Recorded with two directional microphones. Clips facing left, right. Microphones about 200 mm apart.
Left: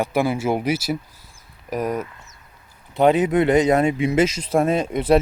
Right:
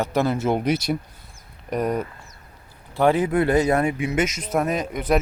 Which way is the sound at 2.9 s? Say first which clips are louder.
Left 3 dB; 20° left (ahead or behind).